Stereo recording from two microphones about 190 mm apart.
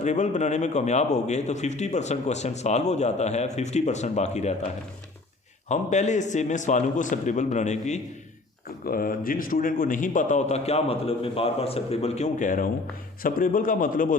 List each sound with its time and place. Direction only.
0.0 s a man's voice: 40° left (ahead or behind)
5.6 s a man's voice: 40° left (ahead or behind)
8.8 s a man's voice: 50° left (ahead or behind)